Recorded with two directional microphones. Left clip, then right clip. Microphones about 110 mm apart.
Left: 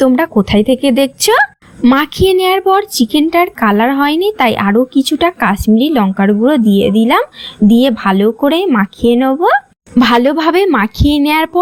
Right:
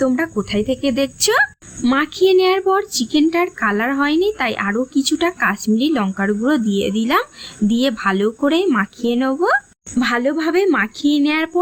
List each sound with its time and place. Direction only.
0.0 s a woman's voice: 40° left (ahead or behind)
1.8 s speech: 25° left (ahead or behind)
2.2 s speech: 45° left (ahead or behind)
10.0 s a woman's voice: 45° left (ahead or behind)